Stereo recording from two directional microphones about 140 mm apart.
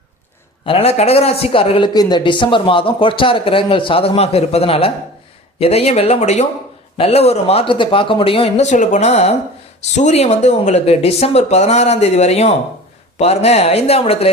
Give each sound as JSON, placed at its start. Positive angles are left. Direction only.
{"t": 0.6, "sound": "a man's voice", "side_deg": 40}